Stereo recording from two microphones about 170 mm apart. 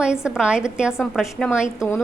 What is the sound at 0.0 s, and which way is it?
Speech, 5° right (ahead or behind).